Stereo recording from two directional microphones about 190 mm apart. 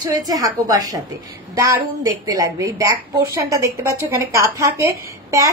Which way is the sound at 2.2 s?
20° right (ahead or behind).